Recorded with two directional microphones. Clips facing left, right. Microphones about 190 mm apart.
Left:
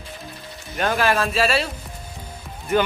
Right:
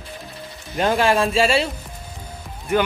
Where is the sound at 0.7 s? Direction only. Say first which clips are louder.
Right 3 dB; 25° right (ahead or behind).